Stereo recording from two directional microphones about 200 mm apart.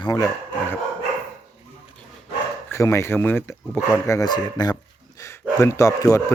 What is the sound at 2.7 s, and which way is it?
Speech, 15° left (ahead or behind).